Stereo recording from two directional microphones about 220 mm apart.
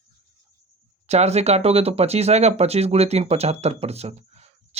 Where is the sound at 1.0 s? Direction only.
30° right (ahead or behind).